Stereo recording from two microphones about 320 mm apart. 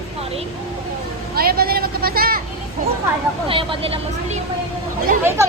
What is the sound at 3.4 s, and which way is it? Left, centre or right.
A woman's voice, centre.